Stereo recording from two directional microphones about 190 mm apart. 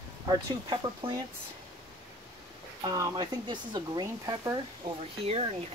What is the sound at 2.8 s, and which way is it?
Speech, 20° right (ahead or behind).